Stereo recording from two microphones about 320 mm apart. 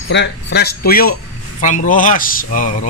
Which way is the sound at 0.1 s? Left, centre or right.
Left.